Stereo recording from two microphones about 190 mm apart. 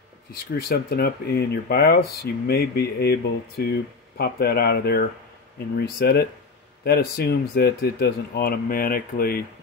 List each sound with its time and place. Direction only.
0.3 s speech: 55° left (ahead or behind)